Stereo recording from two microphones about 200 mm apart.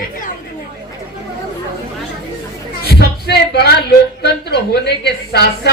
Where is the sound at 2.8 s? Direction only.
55° left (ahead or behind).